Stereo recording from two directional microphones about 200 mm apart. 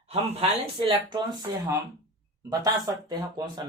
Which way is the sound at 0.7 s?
25° right (ahead or behind).